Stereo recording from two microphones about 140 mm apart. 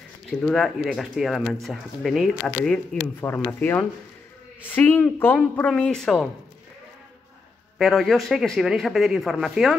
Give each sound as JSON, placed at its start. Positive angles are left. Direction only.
{"t": 0.3, "sound": "speech", "side_deg": 5}
{"t": 3.2, "sound": "a man's voice", "side_deg": 15}
{"t": 7.8, "sound": "speech", "side_deg": 0}